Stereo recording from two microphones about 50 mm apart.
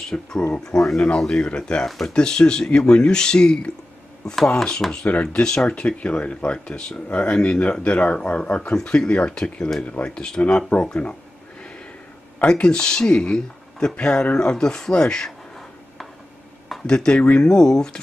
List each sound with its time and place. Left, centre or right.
0.1 s speech: left
0.7 s speech: centre
1.9 s speech: centre
2.1 s speech: centre
12.4 s speech: centre
16.8 s speech: centre
17.2 s speech: left
17.5 s speech: centre